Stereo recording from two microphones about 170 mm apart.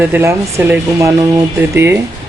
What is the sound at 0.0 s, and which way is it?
Speech, 15° right (ahead or behind).